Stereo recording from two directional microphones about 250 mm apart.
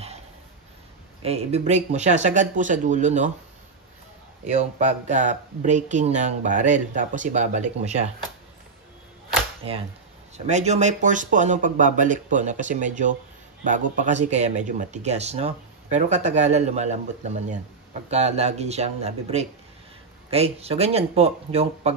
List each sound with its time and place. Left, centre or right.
1.2 s speech: right
4.5 s speech: right
9.6 s speech: right
18.1 s speech: right